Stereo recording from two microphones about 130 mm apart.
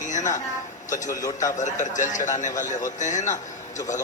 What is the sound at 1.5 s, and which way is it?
A man's voice, 70° left (ahead or behind).